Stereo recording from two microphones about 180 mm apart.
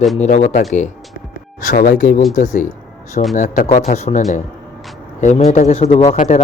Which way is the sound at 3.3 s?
45° left (ahead or behind).